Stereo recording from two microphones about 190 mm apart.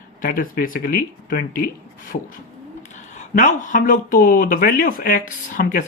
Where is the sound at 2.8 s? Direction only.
40° left (ahead or behind).